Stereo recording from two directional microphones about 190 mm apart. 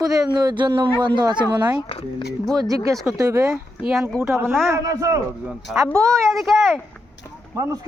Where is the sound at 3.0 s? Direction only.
15° right (ahead or behind).